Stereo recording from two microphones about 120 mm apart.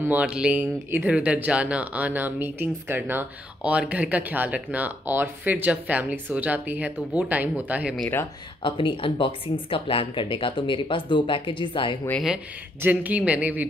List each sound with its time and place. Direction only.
0.0 s speech: 15° right (ahead or behind)
8.6 s speech: 45° left (ahead or behind)
12.8 s speech: 15° right (ahead or behind)